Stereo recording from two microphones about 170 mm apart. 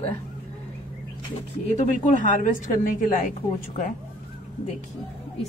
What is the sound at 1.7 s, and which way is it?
A woman's voice, 45° left (ahead or behind).